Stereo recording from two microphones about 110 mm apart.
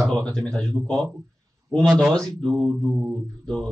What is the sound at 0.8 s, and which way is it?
Speech, 20° right (ahead or behind).